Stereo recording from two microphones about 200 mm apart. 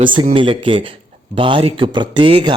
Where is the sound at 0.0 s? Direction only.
25° right (ahead or behind).